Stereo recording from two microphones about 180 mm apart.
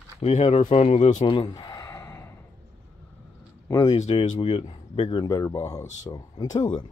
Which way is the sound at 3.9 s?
35° left (ahead or behind).